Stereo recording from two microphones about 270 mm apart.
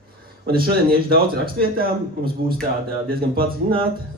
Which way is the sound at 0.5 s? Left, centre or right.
Right.